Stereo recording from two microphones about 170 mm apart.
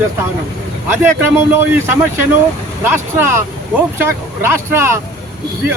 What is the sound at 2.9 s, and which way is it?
Speech, 15° right (ahead or behind).